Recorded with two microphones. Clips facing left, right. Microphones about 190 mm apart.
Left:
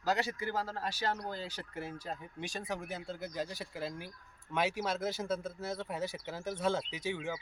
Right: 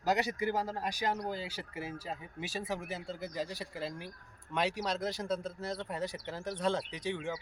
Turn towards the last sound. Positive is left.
turn(degrees=5)  # may be behind; listen again after turning